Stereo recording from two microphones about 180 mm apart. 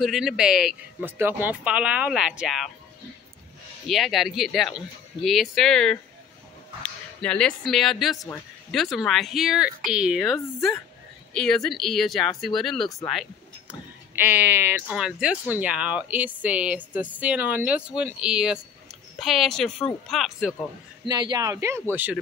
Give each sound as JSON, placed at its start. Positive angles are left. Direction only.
{"t": 0.0, "sound": "a man's voice", "side_deg": 0}
{"t": 3.8, "sound": "a man's voice", "side_deg": 0}
{"t": 21.1, "sound": "speech", "side_deg": -25}